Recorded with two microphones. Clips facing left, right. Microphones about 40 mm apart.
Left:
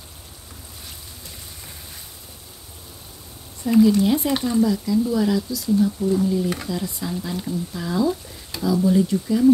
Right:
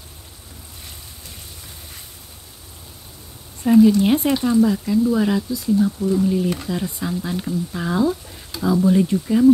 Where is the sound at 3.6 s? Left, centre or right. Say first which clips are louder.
Right 3 dB; right.